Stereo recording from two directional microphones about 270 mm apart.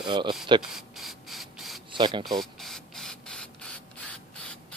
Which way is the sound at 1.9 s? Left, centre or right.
Centre.